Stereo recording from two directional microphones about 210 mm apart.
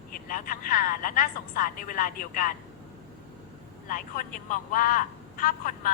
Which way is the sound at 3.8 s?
40° left (ahead or behind).